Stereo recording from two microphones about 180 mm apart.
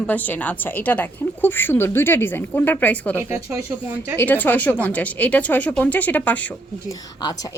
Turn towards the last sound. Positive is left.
turn(degrees=20)  # may be behind; listen again after turning